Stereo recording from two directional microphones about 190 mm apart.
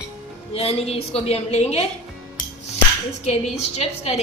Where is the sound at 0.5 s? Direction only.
35° left (ahead or behind).